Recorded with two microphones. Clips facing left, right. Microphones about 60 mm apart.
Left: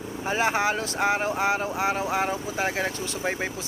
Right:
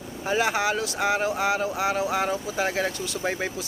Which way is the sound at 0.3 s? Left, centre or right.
Left.